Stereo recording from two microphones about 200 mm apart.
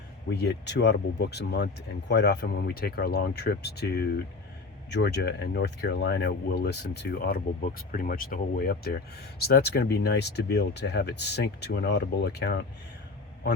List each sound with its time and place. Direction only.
0.3 s speech: 55° left (ahead or behind)